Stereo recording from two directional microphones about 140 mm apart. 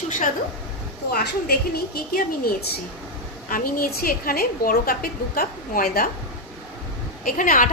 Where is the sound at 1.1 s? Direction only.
90° left.